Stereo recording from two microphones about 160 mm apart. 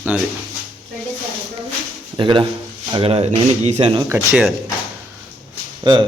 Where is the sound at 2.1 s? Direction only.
30° right (ahead or behind).